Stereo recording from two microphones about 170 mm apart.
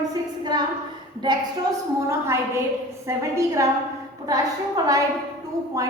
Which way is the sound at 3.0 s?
15° right (ahead or behind).